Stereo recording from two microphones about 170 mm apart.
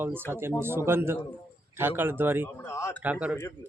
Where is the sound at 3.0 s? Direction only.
10° right (ahead or behind).